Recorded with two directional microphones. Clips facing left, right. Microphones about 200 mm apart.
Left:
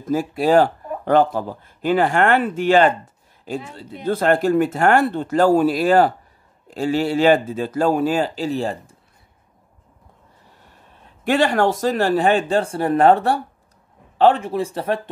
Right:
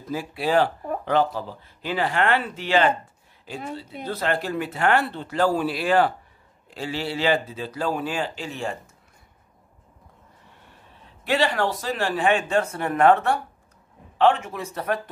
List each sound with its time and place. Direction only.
0.0 s speech: 45° left (ahead or behind)
11.2 s speech: 50° left (ahead or behind); by 15.0 s 30° left (ahead or behind)